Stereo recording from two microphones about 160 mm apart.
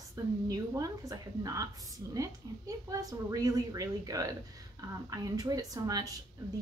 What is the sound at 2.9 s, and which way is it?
A woman's voice, 20° right (ahead or behind).